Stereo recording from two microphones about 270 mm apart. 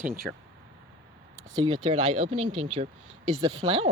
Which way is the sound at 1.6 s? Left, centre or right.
Centre.